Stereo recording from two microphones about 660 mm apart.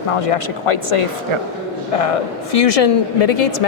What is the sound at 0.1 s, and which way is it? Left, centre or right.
Speech, left.